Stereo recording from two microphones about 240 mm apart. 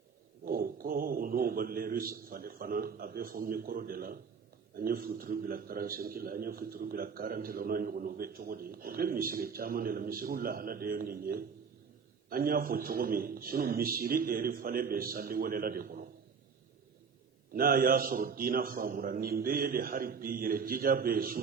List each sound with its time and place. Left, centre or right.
0.4 s a man's voice: right
17.5 s a man's voice: right